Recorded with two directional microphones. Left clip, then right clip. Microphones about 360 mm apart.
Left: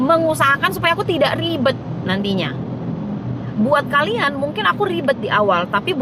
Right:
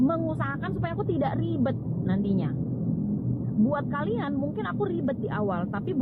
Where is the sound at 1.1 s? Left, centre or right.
Left.